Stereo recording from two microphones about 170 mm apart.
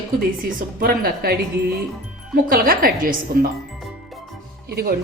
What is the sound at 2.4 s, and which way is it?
A woman's voice, 55° right (ahead or behind).